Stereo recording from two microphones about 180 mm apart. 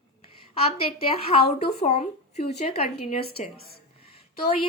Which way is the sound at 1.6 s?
35° left (ahead or behind).